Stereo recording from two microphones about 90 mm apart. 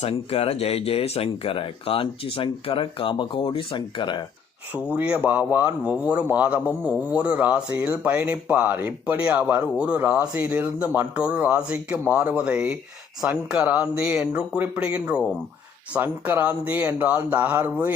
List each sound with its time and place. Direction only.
0.1 s speech: 90° left; by 4.2 s 60° left (ahead or behind)
4.9 s a man's voice: 15° right (ahead or behind)